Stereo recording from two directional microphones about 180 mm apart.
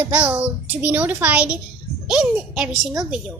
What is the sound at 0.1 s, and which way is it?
A child's voice, 10° right (ahead or behind).